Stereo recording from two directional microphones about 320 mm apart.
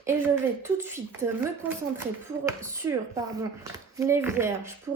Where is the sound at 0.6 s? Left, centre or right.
Centre.